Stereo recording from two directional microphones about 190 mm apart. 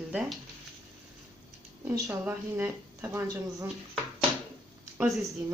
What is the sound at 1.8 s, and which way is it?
Speech, 15° right (ahead or behind).